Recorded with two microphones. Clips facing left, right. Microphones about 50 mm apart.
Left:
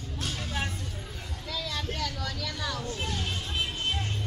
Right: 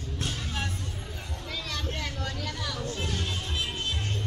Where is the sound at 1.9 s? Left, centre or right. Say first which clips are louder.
Left 1 dB; right.